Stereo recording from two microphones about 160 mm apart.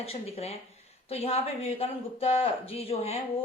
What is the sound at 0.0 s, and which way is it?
Speech, 40° left (ahead or behind).